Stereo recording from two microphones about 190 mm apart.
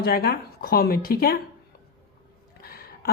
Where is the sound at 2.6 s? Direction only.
55° left (ahead or behind).